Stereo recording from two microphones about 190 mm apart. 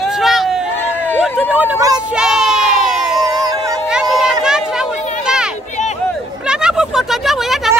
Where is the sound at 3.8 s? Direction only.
Centre (ahead or behind).